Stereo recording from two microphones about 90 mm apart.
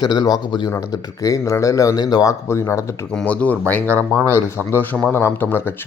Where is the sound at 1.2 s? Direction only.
40° left (ahead or behind).